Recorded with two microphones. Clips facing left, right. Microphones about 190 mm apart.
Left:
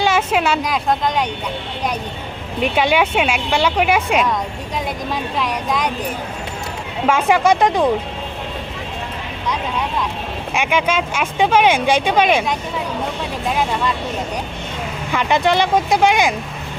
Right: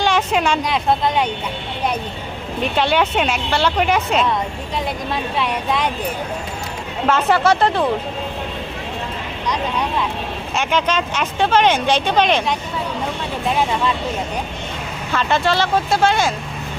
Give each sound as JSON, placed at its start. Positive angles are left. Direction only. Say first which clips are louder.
{"t": 0.0, "sound": "speech", "louder": "left 1 dB", "side_deg": 5}
{"t": 2.6, "sound": "speech", "louder": "left 2 dB", "side_deg": 10}
{"t": 5.1, "sound": "speech", "louder": "even", "side_deg": 0}
{"t": 7.1, "sound": "speech", "louder": "left 1 dB", "side_deg": 10}
{"t": 10.5, "sound": "speech", "louder": "left 1 dB", "side_deg": 10}
{"t": 15.1, "sound": "speech", "louder": "left 2 dB", "side_deg": 15}